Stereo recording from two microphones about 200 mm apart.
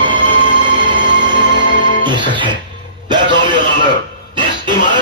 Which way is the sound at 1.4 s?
60° right (ahead or behind).